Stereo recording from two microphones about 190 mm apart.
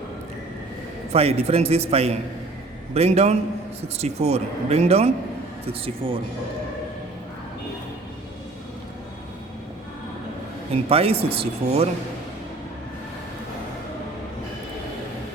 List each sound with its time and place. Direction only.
1.1 s a man's voice: 30° right (ahead or behind)
10.8 s a man's voice: 30° right (ahead or behind)